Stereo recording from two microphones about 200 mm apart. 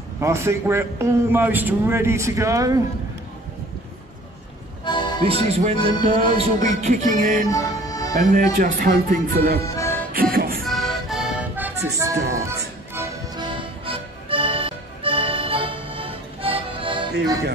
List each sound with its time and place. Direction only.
0.2 s a man's voice: 15° right (ahead or behind)
4.8 s music: 20° left (ahead or behind)
5.2 s speech: 30° right (ahead or behind)
7.4 s music: 15° left (ahead or behind)
8.1 s speech: 45° right (ahead or behind)
9.7 s music: 15° left (ahead or behind)
10.6 s music: centre (ahead or behind)
13.5 s music: 25° right (ahead or behind)